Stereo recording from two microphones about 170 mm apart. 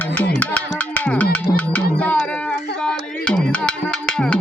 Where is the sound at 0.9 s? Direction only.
10° left (ahead or behind).